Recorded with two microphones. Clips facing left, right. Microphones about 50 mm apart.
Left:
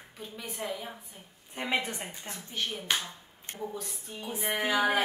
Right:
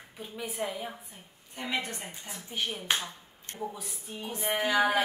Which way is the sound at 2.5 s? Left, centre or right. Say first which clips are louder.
Right 1 dB; centre.